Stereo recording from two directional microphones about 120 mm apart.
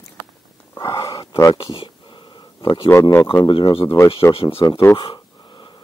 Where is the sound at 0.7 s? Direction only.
35° left (ahead or behind).